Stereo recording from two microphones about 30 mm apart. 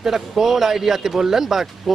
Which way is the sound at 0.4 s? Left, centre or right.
Centre.